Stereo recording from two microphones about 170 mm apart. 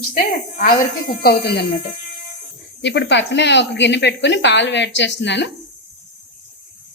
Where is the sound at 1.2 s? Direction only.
70° left (ahead or behind).